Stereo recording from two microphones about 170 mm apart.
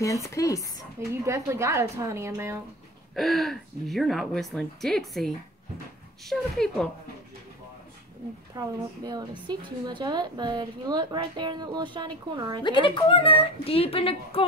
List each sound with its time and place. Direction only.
0.0 s speech: 20° left (ahead or behind)
1.2 s a woman's voice: 15° right (ahead or behind)
3.2 s a woman's voice: centre (ahead or behind)
8.5 s a woman's voice: 25° right (ahead or behind)
12.8 s speech: 30° left (ahead or behind)